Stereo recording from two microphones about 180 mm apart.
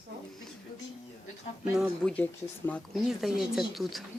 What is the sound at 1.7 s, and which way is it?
Speech, 5° right (ahead or behind).